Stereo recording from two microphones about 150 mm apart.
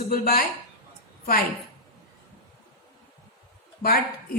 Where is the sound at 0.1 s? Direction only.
80° left.